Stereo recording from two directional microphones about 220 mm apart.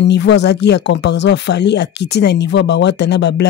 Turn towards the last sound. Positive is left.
turn(degrees=50)  # may be behind; listen again after turning